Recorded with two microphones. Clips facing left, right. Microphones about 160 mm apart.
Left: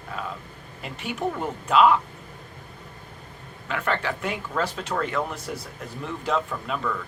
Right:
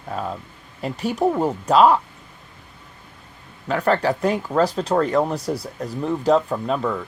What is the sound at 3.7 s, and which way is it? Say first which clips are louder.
Speech: right 8 dB; 35° right (ahead or behind).